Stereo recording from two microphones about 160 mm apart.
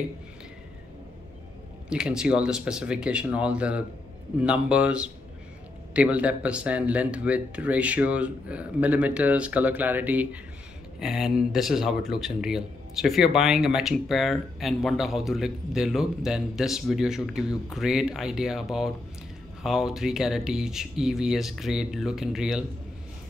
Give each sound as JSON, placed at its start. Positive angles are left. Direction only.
{"t": 1.9, "sound": "speech", "side_deg": -5}